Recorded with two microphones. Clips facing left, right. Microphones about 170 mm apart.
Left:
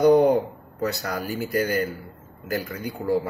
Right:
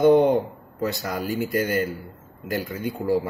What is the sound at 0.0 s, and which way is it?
Speech, centre (ahead or behind).